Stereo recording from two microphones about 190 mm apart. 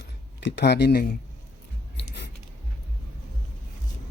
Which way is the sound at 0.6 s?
60° left (ahead or behind).